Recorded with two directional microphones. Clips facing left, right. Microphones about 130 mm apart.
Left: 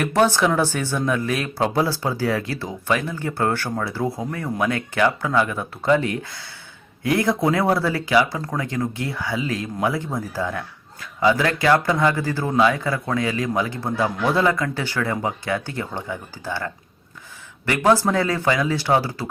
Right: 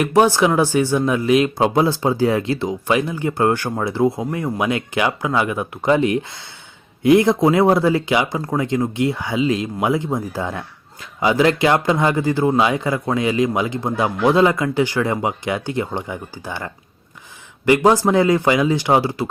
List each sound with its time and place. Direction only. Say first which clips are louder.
0.0 s speech: right 4 dB; 15° right (ahead or behind)